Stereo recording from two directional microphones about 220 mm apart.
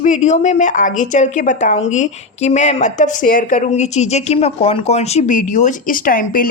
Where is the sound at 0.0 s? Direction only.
35° left (ahead or behind).